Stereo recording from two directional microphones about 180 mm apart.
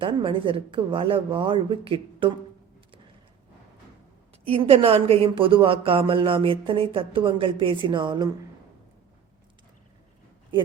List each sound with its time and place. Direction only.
0.0 s speech: 30° right (ahead or behind)
4.4 s speech: 30° right (ahead or behind)